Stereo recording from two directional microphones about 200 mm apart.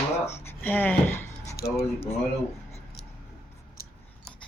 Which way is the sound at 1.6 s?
50° left (ahead or behind).